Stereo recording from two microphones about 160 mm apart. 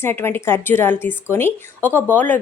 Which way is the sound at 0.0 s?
15° left (ahead or behind).